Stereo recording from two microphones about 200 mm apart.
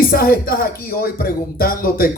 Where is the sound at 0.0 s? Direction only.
45° left (ahead or behind).